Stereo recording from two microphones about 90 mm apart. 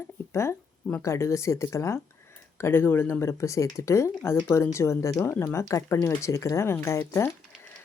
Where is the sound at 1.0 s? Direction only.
35° left (ahead or behind).